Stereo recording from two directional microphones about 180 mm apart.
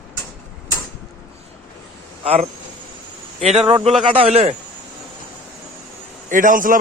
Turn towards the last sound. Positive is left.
turn(degrees=-50)  # may be behind; listen again after turning